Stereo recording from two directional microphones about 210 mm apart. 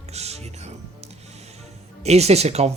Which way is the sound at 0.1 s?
30° right (ahead or behind).